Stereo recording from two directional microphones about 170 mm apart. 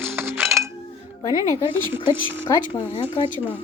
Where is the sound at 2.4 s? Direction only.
25° left (ahead or behind).